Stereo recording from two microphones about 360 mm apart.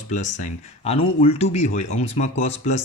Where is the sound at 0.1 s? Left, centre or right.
Centre.